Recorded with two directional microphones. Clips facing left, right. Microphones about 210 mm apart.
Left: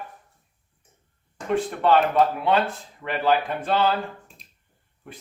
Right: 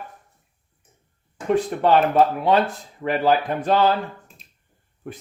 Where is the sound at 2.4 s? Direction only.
40° right (ahead or behind).